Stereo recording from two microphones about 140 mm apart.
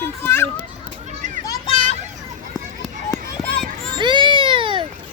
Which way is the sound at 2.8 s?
5° left (ahead or behind).